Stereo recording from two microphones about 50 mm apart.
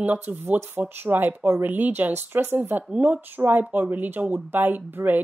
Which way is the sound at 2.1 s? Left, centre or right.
Right.